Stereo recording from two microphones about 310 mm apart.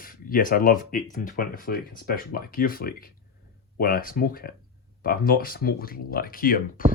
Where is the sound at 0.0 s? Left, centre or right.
Left.